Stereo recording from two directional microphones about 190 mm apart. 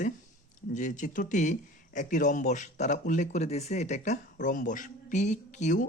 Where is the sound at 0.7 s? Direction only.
40° left (ahead or behind).